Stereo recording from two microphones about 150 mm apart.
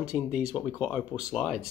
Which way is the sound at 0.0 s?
5° right (ahead or behind).